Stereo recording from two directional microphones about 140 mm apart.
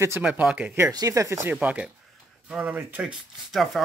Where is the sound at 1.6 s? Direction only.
10° right (ahead or behind).